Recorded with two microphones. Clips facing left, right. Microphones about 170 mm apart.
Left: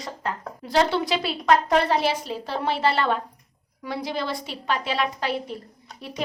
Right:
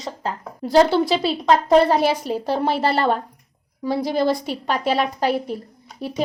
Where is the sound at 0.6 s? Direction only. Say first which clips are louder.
Right 7 dB; 40° right (ahead or behind).